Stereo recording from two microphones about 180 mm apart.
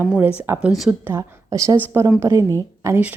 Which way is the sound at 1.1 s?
15° right (ahead or behind).